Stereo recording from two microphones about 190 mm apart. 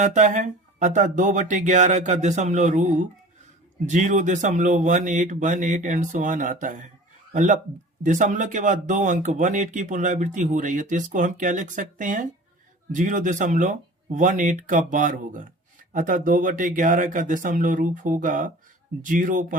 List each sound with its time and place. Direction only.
0.0 s speech: 40° right (ahead or behind)
3.8 s speech: 40° right (ahead or behind)